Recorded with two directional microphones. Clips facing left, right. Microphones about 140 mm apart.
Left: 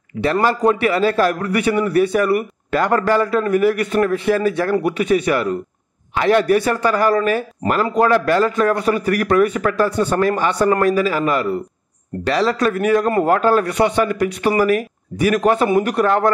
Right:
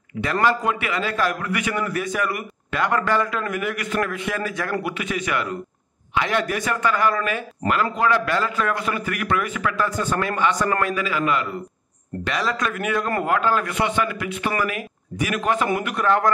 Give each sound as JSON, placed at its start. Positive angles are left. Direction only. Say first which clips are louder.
{"t": 0.2, "sound": "a man's voice", "louder": "left 5 dB", "side_deg": 35}